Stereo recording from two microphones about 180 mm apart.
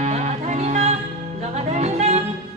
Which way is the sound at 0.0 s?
40° right (ahead or behind).